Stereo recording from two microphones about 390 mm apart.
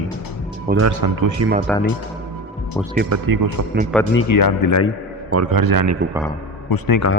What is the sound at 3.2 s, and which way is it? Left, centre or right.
Speech, right.